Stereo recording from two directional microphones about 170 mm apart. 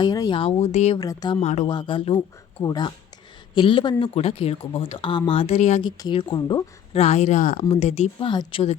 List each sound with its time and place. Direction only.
0.0 s speech: 25° left (ahead or behind); by 0.9 s 40° left (ahead or behind)
0.9 s speech: 20° left (ahead or behind)
1.4 s speech: 40° left (ahead or behind)
1.7 s speech: 30° left (ahead or behind)
5.8 s speech: 25° left (ahead or behind)
7.0 s speech: 40° left (ahead or behind)
8.3 s speech: 25° left (ahead or behind)